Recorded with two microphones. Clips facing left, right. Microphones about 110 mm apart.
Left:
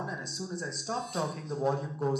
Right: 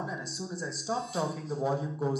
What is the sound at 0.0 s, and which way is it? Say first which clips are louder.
Speech: right 1 dB; centre (ahead or behind).